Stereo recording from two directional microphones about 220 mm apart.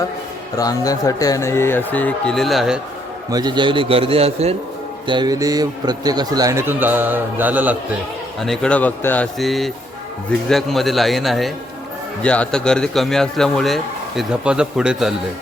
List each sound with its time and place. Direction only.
0.5 s speech: 15° left (ahead or behind); by 2.8 s centre (ahead or behind)
3.2 s a man's voice: 20° right (ahead or behind)
8.4 s speech: 5° left (ahead or behind)